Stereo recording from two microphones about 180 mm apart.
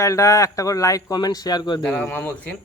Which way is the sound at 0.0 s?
15° left (ahead or behind).